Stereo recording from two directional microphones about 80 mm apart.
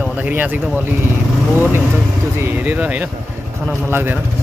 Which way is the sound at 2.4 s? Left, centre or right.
Right.